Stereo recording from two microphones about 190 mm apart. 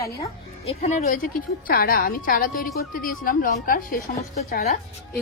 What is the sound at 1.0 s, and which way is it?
A woman's voice, 50° left (ahead or behind).